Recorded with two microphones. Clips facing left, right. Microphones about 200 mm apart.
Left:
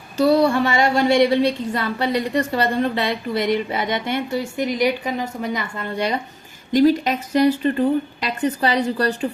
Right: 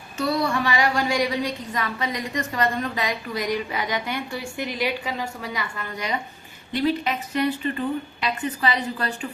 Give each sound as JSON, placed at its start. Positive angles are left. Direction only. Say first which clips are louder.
{"t": 0.2, "sound": "a woman's voice", "louder": "left 8 dB", "side_deg": 35}
{"t": 6.7, "sound": "a woman's voice", "louder": "left 8 dB", "side_deg": 40}